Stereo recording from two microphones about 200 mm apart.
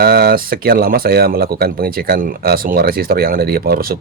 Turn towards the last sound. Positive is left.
turn(degrees=-50)  # may be behind; listen again after turning